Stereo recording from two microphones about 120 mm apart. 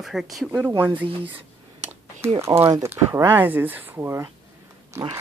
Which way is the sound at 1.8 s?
70° right (ahead or behind).